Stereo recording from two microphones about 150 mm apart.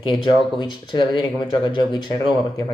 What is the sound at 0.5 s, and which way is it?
Speech, 30° left (ahead or behind).